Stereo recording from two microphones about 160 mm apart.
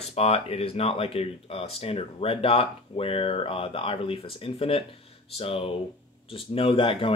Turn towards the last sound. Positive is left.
turn(degrees=35)  # may be behind; listen again after turning